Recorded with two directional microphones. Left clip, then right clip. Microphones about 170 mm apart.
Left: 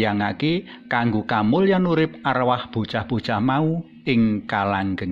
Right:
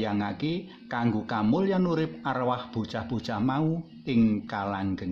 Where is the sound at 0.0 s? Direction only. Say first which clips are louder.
Left 8 dB; 20° left (ahead or behind).